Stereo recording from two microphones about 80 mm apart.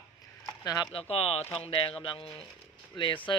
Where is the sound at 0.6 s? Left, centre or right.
Left.